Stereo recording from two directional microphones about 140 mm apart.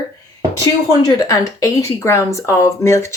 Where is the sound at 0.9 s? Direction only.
25° left (ahead or behind).